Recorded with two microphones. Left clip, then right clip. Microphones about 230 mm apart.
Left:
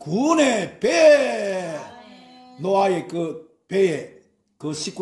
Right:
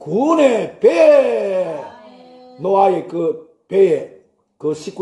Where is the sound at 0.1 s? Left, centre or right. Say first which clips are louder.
Right 5 dB; left.